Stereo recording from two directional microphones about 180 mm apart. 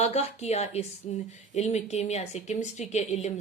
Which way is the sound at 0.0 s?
35° left (ahead or behind).